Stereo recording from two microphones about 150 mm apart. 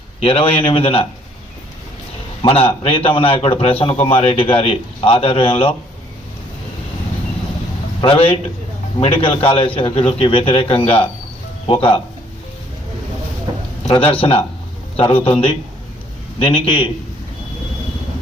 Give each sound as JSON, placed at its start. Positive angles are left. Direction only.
{"t": 0.2, "sound": "a man's voice", "side_deg": 40}
{"t": 2.4, "sound": "a man's voice", "side_deg": 40}
{"t": 8.0, "sound": "a man's voice", "side_deg": 40}
{"t": 13.9, "sound": "a man's voice", "side_deg": 35}